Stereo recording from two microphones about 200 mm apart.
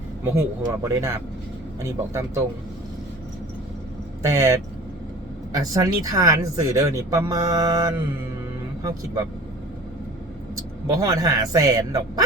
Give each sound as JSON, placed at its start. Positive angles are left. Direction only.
{"t": 0.3, "sound": "speech", "side_deg": -15}
{"t": 4.2, "sound": "speech", "side_deg": -15}
{"t": 5.8, "sound": "speech", "side_deg": -15}
{"t": 10.8, "sound": "speech", "side_deg": -15}